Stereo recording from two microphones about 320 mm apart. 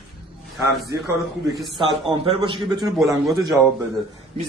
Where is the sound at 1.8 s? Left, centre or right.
Centre.